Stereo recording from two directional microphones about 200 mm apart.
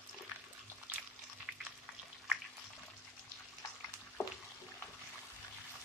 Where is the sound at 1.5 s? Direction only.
5° right (ahead or behind).